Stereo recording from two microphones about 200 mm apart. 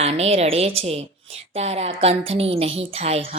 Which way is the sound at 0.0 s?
30° right (ahead or behind).